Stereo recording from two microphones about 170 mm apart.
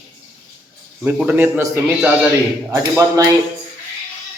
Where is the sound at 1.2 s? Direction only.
10° right (ahead or behind).